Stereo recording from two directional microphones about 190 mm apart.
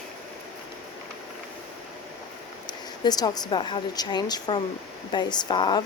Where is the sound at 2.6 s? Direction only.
20° left (ahead or behind).